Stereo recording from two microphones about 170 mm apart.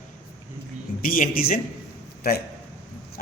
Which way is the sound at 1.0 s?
55° left (ahead or behind).